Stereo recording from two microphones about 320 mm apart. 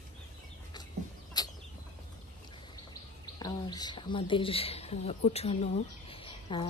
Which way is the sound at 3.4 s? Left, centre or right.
Centre.